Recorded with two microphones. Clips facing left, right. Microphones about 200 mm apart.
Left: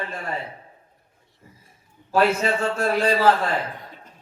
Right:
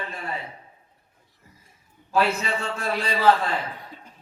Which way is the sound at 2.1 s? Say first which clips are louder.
Left 4 dB; 50° left (ahead or behind).